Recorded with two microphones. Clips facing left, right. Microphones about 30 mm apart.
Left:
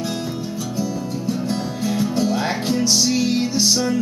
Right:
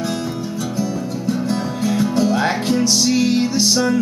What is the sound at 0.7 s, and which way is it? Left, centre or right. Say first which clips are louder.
Music: right 1 dB; centre.